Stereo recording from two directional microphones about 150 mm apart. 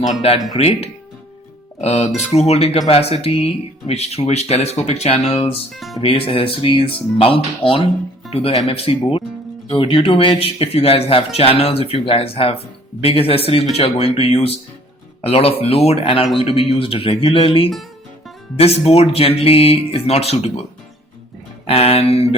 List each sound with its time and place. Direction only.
0.0 s speech: 45° left (ahead or behind)
21.7 s speech: 40° left (ahead or behind)